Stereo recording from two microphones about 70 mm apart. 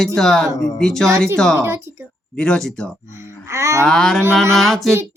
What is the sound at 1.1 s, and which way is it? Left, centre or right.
Speech, right.